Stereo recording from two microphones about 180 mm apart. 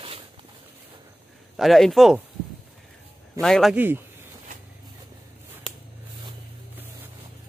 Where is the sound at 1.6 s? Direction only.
Centre (ahead or behind).